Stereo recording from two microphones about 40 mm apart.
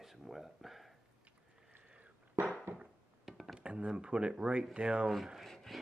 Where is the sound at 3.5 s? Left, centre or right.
Right.